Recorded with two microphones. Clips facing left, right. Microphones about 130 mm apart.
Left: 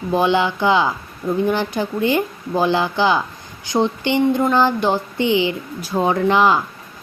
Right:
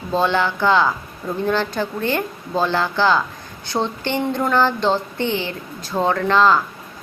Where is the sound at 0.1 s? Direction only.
15° left (ahead or behind).